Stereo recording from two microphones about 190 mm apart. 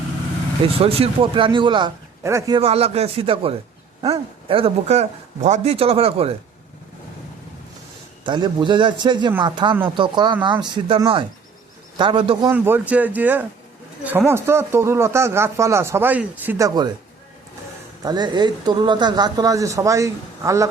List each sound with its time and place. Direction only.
0.6 s speech: 30° right (ahead or behind)
2.6 s speech: 30° right (ahead or behind)
8.2 s speech: 25° right (ahead or behind)
12.5 s speech: 10° right (ahead or behind)
18.0 s speech: 20° right (ahead or behind)